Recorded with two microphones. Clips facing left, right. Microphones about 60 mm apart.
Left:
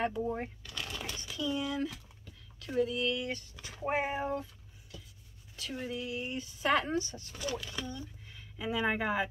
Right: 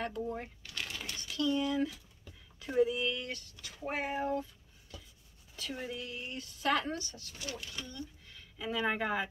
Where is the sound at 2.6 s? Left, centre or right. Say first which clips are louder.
Right 1 dB; centre.